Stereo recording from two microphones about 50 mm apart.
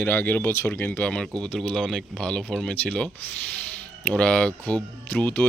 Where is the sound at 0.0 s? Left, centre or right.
Left.